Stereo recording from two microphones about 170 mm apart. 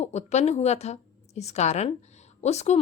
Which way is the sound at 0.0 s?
40° left (ahead or behind).